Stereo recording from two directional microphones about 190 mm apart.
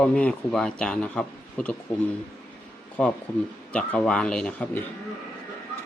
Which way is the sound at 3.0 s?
5° left (ahead or behind).